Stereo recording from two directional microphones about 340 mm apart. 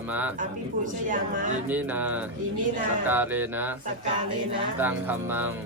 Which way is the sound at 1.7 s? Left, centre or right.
Centre.